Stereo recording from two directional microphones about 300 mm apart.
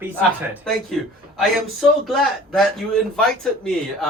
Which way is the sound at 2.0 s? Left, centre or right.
Centre.